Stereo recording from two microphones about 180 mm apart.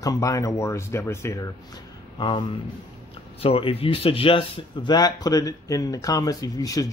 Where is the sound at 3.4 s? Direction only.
30° left (ahead or behind).